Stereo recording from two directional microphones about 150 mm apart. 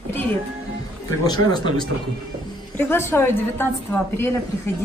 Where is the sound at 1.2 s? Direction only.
25° left (ahead or behind).